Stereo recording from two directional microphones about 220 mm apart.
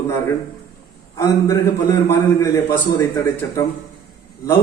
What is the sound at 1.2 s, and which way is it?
A man's voice, 10° left (ahead or behind).